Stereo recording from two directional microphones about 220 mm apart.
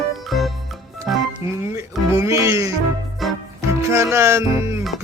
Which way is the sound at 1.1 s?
Centre (ahead or behind).